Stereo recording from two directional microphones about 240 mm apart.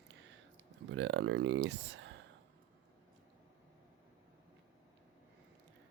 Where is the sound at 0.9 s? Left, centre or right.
Right.